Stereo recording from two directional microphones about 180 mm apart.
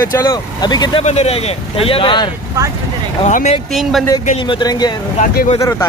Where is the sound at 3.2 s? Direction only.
40° left (ahead or behind).